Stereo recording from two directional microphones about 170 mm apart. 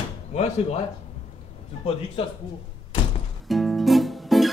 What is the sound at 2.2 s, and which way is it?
Speech, 30° left (ahead or behind).